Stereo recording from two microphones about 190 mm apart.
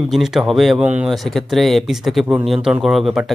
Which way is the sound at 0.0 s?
Centre (ahead or behind).